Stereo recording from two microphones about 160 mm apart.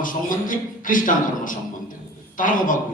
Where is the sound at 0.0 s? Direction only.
55° left (ahead or behind).